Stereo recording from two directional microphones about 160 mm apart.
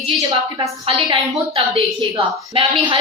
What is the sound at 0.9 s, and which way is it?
A woman's voice, 35° right (ahead or behind).